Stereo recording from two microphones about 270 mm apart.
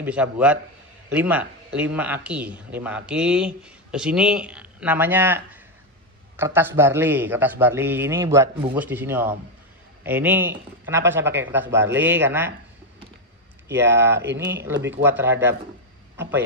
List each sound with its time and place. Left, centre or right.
0.0 s a man's voice: centre
13.7 s a man's voice: centre
14.1 s speech: right
14.5 s a man's voice: centre